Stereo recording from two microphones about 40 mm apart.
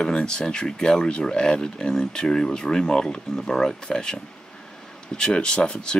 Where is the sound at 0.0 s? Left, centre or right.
Left.